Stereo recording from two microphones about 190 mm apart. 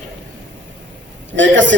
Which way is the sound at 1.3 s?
75° right (ahead or behind).